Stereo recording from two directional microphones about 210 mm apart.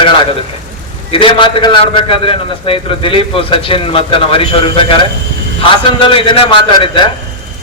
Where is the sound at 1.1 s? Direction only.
25° left (ahead or behind).